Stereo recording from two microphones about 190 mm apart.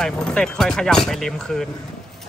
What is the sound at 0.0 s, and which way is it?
Speech, 5° left (ahead or behind).